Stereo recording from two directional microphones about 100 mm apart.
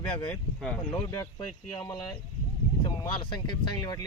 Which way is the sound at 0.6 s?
5° left (ahead or behind).